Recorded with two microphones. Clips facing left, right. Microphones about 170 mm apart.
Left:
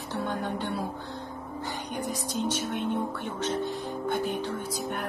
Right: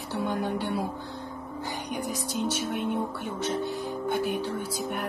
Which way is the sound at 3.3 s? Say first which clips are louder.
Right 1 dB; 10° right (ahead or behind).